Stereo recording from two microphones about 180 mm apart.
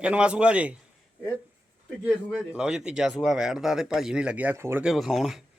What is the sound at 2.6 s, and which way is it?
Speech, 5° right (ahead or behind).